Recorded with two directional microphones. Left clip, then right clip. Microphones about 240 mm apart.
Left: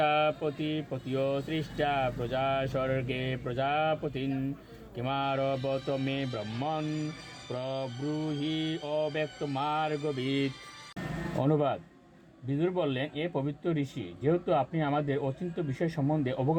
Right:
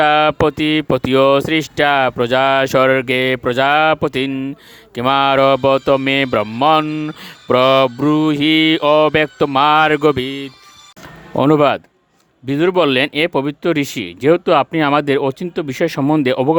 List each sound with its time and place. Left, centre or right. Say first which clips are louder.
0.0 s speech: right 15 dB; right
11.3 s speech: right 17 dB; right